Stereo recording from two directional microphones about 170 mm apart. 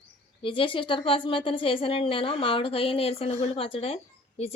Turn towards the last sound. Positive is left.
turn(degrees=35)  # may be behind; listen again after turning